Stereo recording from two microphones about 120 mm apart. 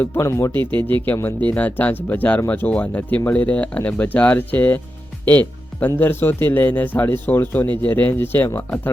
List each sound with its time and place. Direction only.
0.0 s speech: 20° left (ahead or behind)